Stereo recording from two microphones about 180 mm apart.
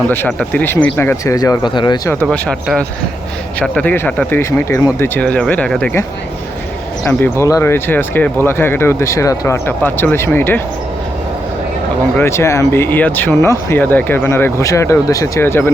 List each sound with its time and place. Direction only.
0.3 s speech: 5° left (ahead or behind); by 2.1 s 25° left (ahead or behind)
2.2 s speech: centre (ahead or behind)
12.1 s speech: 15° left (ahead or behind)